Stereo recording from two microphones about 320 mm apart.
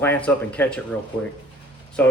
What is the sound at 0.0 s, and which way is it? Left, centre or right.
Speech, centre.